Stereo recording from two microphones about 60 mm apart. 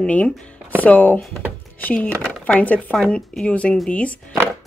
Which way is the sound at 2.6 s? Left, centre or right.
Left.